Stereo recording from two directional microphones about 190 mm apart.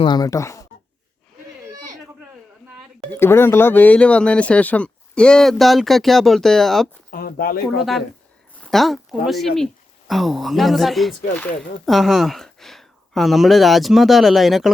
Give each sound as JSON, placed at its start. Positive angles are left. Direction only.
{"t": 0.0, "sound": "speech", "side_deg": 20}
{"t": 3.2, "sound": "speech", "side_deg": 10}
{"t": 7.1, "sound": "speech", "side_deg": 50}
{"t": 7.8, "sound": "speech", "side_deg": 0}